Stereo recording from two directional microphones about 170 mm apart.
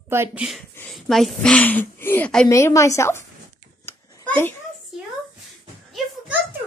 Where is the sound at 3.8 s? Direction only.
15° left (ahead or behind).